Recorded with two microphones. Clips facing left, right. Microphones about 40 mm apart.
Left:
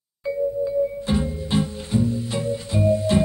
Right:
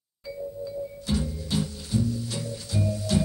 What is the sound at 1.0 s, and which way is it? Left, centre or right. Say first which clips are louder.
Music: left 5 dB; left.